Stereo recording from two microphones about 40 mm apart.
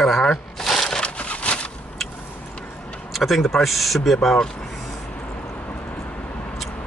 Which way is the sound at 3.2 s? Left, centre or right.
Centre.